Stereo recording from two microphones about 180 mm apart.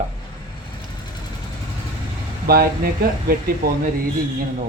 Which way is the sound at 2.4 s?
55° right (ahead or behind).